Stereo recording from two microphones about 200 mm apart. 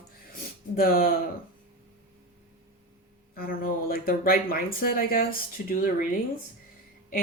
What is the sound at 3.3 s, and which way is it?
Speech, 45° left (ahead or behind).